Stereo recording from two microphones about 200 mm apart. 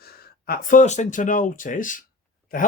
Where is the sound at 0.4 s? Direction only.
45° left (ahead or behind).